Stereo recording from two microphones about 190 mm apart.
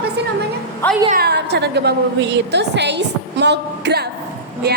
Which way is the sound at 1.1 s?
55° right (ahead or behind).